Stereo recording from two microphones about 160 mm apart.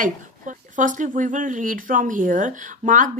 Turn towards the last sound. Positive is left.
turn(degrees=-55)  # may be behind; listen again after turning